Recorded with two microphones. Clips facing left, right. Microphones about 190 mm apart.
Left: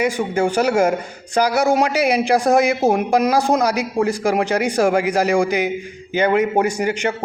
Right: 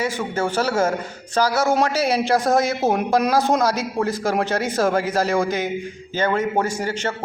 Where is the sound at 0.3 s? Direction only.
15° left (ahead or behind).